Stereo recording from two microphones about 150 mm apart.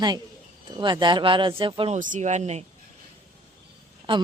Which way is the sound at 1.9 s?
60° right (ahead or behind).